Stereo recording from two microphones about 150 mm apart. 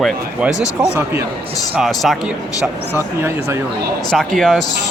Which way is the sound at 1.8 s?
Centre (ahead or behind).